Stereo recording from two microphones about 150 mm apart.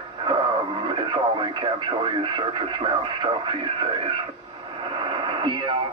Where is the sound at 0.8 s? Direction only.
30° right (ahead or behind).